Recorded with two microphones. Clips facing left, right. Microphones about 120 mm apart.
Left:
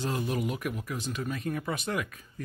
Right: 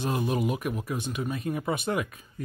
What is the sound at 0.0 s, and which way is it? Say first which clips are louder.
Speech: right 3 dB; 20° right (ahead or behind).